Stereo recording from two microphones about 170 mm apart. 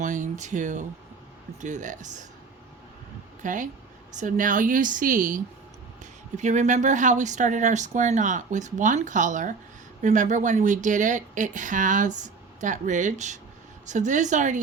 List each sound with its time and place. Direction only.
0.0 s a sound: 45° right (ahead or behind)
1.6 s speech: 45° right (ahead or behind)
3.4 s speech: 50° right (ahead or behind)